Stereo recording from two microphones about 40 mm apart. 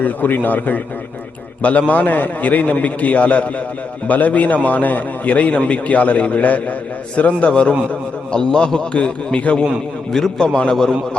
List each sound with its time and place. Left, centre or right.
0.0 s a man's voice: left
1.9 s a man's voice: left
10.1 s a man's voice: centre